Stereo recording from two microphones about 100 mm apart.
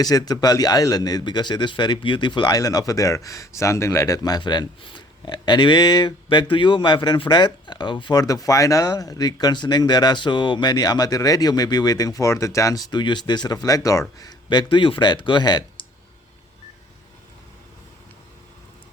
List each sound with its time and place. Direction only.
0.0 s speech: 40° left (ahead or behind)
2.6 s speech: 35° left (ahead or behind)
8.2 s speech: 35° left (ahead or behind)